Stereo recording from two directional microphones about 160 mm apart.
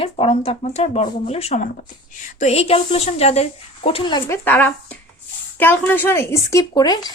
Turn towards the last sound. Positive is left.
turn(degrees=25)  # may be behind; listen again after turning